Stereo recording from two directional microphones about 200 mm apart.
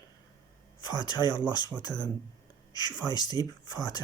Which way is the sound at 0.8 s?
20° left (ahead or behind).